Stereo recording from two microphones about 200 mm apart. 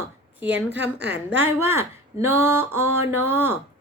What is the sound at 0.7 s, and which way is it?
Speech, 60° right (ahead or behind).